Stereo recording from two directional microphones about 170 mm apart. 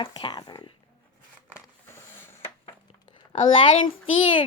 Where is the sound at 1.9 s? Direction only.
10° left (ahead or behind).